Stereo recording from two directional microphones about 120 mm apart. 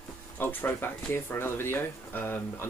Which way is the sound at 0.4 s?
15° left (ahead or behind).